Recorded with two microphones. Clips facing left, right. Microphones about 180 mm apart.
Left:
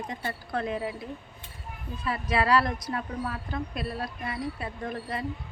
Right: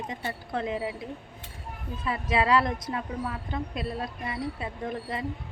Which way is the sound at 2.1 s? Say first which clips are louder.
Even; 20° right (ahead or behind).